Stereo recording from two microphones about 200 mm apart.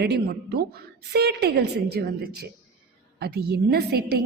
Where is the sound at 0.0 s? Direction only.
55° right (ahead or behind).